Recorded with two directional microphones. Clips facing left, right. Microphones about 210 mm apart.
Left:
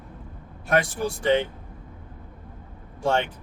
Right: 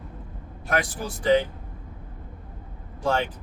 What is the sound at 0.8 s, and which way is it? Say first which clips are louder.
Speech: left 5 dB; 25° left (ahead or behind).